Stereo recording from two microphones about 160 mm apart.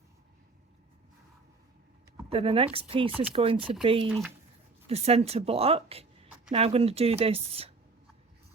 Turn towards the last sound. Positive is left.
turn(degrees=-40)  # may be behind; listen again after turning